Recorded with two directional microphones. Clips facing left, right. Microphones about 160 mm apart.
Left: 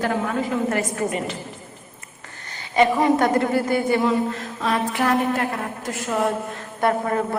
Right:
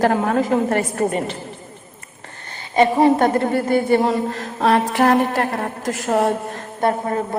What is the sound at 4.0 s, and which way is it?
Speech, 40° right (ahead or behind).